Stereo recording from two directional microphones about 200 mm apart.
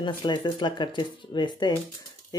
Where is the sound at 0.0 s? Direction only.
20° left (ahead or behind).